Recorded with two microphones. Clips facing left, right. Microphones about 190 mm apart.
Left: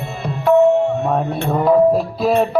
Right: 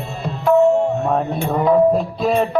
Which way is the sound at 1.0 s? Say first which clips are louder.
Even; 5° left (ahead or behind).